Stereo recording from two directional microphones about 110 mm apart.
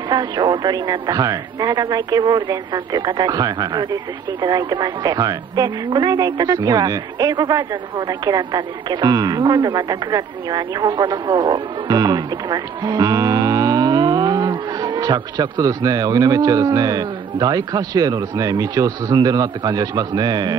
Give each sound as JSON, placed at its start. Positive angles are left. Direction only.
{"t": 0.1, "sound": "speech", "side_deg": -45}